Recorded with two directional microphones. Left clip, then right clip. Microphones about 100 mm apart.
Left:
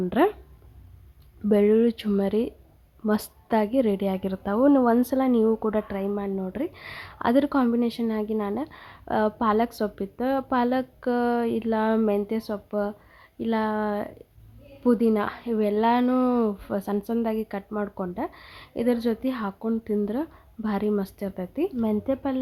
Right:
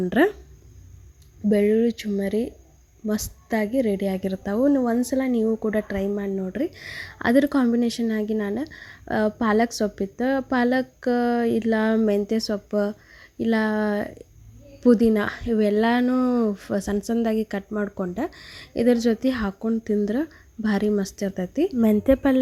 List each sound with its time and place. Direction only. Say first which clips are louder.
0.1 s speech: right 2 dB; 10° right (ahead or behind)
1.5 s a woman's voice: even; 10° left (ahead or behind); by 16.0 s 15° right (ahead or behind)
16.0 s a woman's voice: right 1 dB; 5° left (ahead or behind)
16.5 s speech: right 2 dB; 10° right (ahead or behind)
19.6 s speech: right 3 dB; 10° right (ahead or behind)
21.8 s a woman's voice: right 7 dB; 35° right (ahead or behind)